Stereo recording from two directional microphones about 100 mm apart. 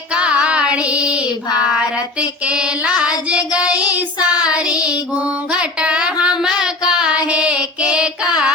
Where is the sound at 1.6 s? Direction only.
10° right (ahead or behind).